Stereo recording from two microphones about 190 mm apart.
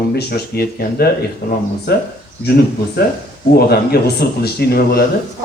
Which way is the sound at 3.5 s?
55° left (ahead or behind).